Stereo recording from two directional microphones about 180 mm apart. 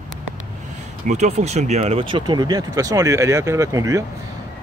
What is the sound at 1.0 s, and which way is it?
Speech, 40° right (ahead or behind).